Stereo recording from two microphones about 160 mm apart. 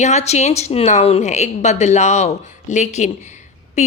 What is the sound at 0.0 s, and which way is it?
A woman's voice, 45° left (ahead or behind).